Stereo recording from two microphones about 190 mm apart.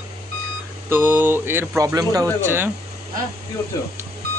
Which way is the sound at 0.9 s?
10° right (ahead or behind).